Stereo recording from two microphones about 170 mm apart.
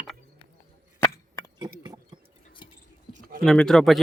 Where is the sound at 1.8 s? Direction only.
25° right (ahead or behind).